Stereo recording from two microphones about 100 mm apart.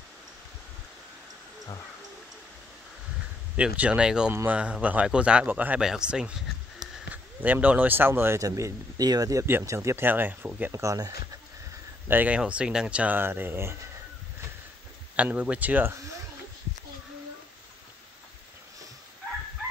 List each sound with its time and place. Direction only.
3.5 s speech: 10° right (ahead or behind); by 9.5 s 35° right (ahead or behind)
9.5 s speech: 25° right (ahead or behind)
10.7 s speech: 30° right (ahead or behind)
12.1 s speech: 15° right (ahead or behind)
15.1 s speech: 15° right (ahead or behind)